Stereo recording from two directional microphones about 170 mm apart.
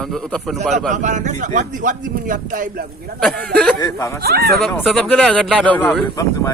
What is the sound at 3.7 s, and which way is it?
Speech, 20° left (ahead or behind).